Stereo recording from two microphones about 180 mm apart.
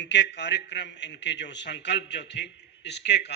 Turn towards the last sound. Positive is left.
turn(degrees=70)  # may be behind; listen again after turning